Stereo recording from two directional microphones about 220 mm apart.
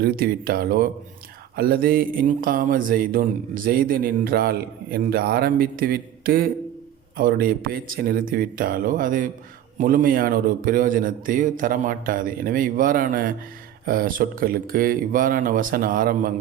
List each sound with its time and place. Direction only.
0.0 s speech: 45° right (ahead or behind)